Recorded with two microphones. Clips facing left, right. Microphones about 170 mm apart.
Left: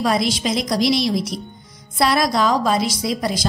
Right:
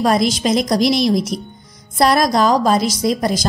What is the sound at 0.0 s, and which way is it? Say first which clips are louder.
A woman's voice: right 4 dB; 45° right (ahead or behind).